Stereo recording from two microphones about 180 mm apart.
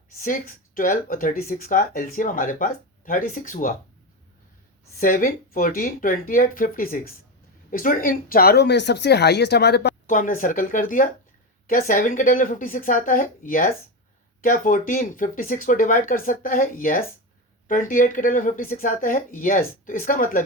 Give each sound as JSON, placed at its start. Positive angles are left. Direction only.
{"t": 0.2, "sound": "speech", "side_deg": 50}
{"t": 4.9, "sound": "speech", "side_deg": 50}
{"t": 10.1, "sound": "speech", "side_deg": 45}